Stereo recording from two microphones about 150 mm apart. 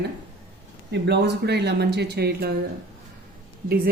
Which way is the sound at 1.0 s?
90° right.